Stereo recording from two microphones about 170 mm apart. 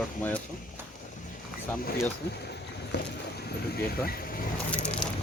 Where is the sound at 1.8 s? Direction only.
60° left (ahead or behind).